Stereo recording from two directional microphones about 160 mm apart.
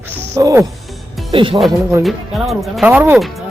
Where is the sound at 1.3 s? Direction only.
35° right (ahead or behind).